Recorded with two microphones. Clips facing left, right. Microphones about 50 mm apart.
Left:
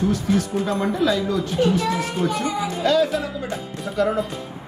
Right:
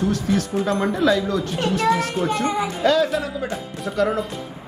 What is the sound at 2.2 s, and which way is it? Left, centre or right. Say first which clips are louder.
Speech: right 1 dB; right.